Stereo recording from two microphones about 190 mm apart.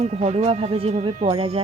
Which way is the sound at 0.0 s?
35° right (ahead or behind).